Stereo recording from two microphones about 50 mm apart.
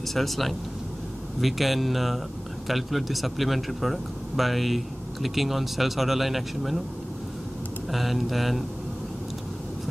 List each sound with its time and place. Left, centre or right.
0.1 s speech: centre
7.9 s speech: centre